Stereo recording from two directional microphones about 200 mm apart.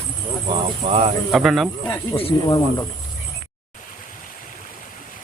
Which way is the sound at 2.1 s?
25° left (ahead or behind).